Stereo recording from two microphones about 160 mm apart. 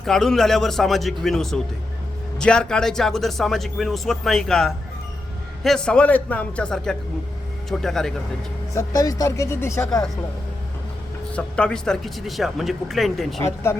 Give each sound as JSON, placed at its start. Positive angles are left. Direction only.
{"t": 0.0, "sound": "speech", "side_deg": 5}
{"t": 8.7, "sound": "speech", "side_deg": 20}
{"t": 11.3, "sound": "speech", "side_deg": 5}
{"t": 13.4, "sound": "speech", "side_deg": 15}